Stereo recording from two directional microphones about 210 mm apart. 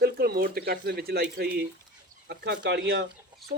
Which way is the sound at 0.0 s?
45° right (ahead or behind).